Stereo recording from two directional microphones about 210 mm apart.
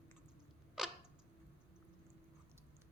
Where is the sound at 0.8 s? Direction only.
Centre (ahead or behind).